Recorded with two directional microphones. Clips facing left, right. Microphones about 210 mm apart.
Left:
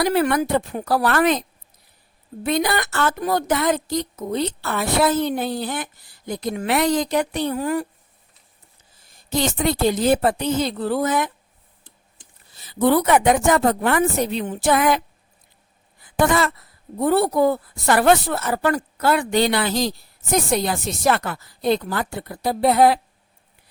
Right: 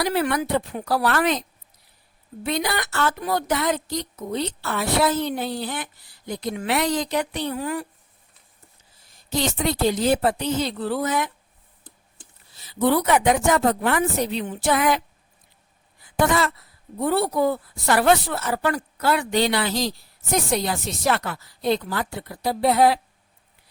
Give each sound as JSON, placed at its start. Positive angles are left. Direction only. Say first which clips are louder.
{"t": 0.0, "sound": "speech", "louder": "left 4 dB", "side_deg": 50}
{"t": 9.3, "sound": "speech", "louder": "left 3 dB", "side_deg": 50}
{"t": 12.5, "sound": "speech", "louder": "left 3 dB", "side_deg": 50}
{"t": 16.1, "sound": "speech", "louder": "left 2 dB", "side_deg": 50}